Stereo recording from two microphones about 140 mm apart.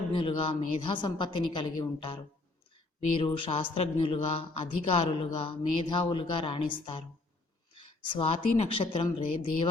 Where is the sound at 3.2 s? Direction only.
40° left (ahead or behind).